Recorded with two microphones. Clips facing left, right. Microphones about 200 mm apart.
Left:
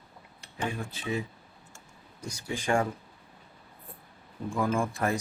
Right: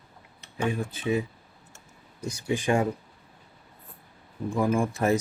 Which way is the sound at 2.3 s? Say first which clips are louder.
Right 3 dB; 20° right (ahead or behind).